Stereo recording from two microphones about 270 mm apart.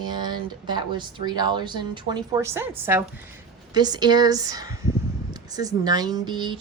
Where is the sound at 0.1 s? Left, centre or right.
Centre.